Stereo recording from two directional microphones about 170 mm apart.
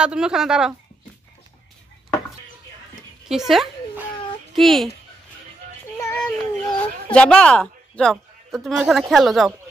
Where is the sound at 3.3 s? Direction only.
Centre (ahead or behind).